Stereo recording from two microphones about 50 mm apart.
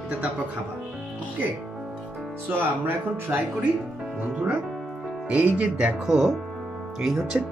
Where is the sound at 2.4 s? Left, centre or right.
Right.